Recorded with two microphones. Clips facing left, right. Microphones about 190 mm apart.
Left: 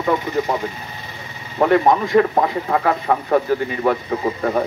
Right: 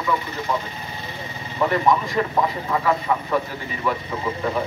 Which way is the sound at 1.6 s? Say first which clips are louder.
Left 5 dB; 55° left (ahead or behind).